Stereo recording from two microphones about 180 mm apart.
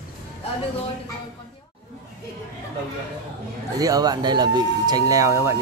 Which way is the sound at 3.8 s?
20° right (ahead or behind).